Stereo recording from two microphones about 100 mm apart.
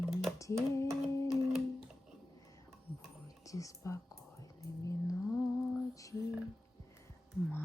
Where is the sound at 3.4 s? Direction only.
35° left (ahead or behind).